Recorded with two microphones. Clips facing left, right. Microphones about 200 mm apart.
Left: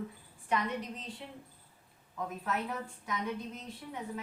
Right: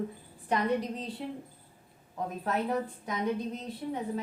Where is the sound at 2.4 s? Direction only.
35° right (ahead or behind).